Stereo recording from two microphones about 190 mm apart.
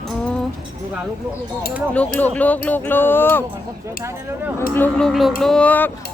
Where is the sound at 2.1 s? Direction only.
10° left (ahead or behind).